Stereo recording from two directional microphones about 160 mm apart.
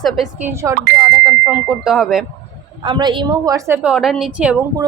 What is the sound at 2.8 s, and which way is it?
A woman's voice, 30° right (ahead or behind).